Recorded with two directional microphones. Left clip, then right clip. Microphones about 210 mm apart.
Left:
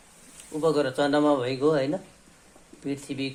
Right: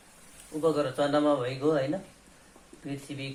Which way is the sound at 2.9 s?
50° left (ahead or behind).